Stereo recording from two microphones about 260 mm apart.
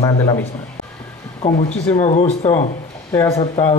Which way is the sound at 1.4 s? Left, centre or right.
Left.